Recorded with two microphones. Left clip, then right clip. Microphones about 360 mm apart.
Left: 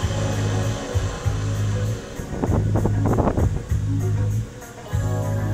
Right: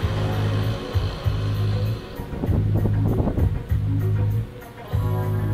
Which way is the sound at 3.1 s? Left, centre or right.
Left.